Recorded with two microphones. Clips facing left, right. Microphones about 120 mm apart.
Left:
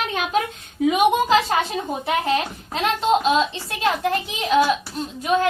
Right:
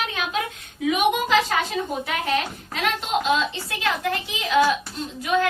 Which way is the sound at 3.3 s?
25° left (ahead or behind).